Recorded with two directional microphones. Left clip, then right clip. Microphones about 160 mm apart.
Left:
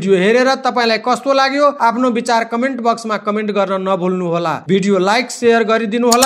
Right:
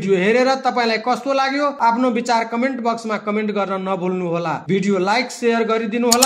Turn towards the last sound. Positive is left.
turn(degrees=30)  # may be behind; listen again after turning